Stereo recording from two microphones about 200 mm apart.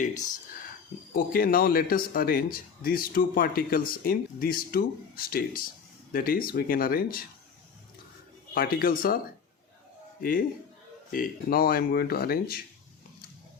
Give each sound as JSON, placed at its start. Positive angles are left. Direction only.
{"t": 1.1, "sound": "speech", "side_deg": 45}
{"t": 8.5, "sound": "speech", "side_deg": 45}
{"t": 11.1, "sound": "speech", "side_deg": 45}